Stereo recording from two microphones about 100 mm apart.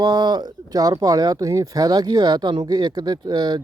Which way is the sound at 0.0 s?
45° right (ahead or behind).